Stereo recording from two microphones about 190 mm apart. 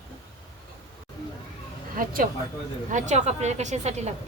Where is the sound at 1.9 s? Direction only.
50° right (ahead or behind).